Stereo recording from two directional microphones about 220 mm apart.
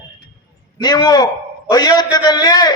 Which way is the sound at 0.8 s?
20° left (ahead or behind).